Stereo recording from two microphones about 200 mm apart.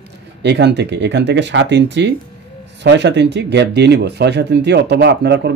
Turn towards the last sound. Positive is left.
turn(degrees=-55)  # may be behind; listen again after turning